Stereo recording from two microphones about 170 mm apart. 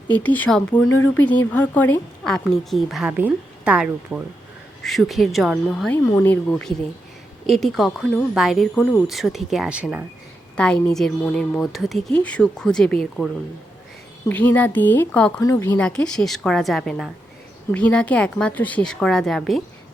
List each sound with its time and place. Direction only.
0.1 s a woman's voice: 10° left (ahead or behind)
6.1 s a woman's voice: 15° left (ahead or behind)
9.0 s speech: centre (ahead or behind)
10.6 s a woman's voice: 10° left (ahead or behind)